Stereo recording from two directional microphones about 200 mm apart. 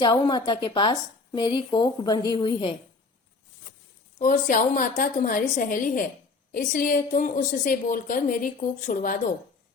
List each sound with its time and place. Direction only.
0.0 s a woman's voice: 20° left (ahead or behind)
4.2 s a woman's voice: 40° left (ahead or behind)